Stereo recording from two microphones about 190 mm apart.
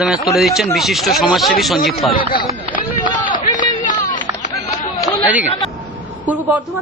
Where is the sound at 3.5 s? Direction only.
45° left (ahead or behind).